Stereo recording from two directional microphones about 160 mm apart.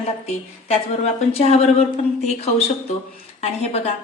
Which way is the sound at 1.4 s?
40° left (ahead or behind).